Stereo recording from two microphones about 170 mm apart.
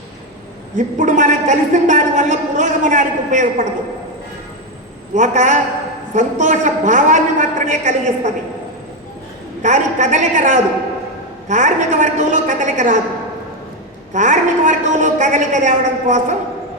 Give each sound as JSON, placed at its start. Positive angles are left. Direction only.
{"t": 0.8, "sound": "a man's voice", "side_deg": -45}
{"t": 5.1, "sound": "a man's voice", "side_deg": -45}
{"t": 9.6, "sound": "a man's voice", "side_deg": -45}
{"t": 14.1, "sound": "a man's voice", "side_deg": -45}